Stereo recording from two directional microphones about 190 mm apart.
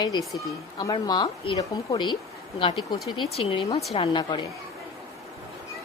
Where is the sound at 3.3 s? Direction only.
30° left (ahead or behind).